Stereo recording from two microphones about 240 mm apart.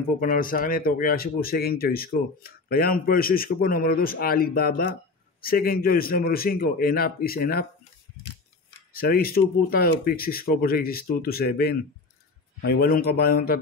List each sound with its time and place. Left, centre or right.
0.2 s speech: left
8.9 s speech: left